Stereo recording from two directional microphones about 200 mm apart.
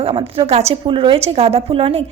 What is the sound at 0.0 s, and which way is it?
A woman's voice, 30° right (ahead or behind).